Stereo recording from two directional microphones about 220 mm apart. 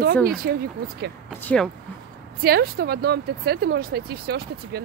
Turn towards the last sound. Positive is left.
turn(degrees=-45)  # may be behind; listen again after turning